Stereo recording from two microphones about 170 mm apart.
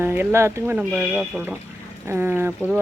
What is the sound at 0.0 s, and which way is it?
Speech, 10° right (ahead or behind).